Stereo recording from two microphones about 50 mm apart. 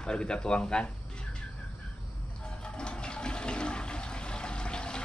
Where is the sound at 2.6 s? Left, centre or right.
Centre.